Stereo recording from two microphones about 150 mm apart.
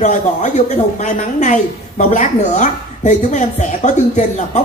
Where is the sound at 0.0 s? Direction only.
50° left (ahead or behind).